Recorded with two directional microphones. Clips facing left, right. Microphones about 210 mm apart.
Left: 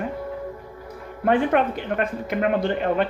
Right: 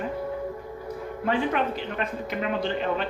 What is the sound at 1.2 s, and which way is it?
Speech, 55° left (ahead or behind).